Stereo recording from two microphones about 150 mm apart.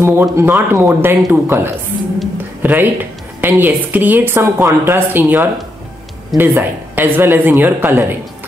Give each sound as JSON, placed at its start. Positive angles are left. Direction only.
{"t": 0.0, "sound": "a woman's voice", "side_deg": -15}